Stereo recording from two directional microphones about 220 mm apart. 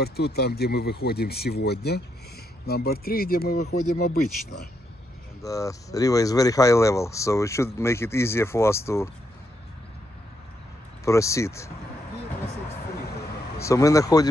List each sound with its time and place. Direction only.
0.0 s speech: 45° left (ahead or behind)
5.4 s speech: 15° left (ahead or behind)
11.1 s speech: 15° left (ahead or behind)
13.6 s speech: 15° left (ahead or behind)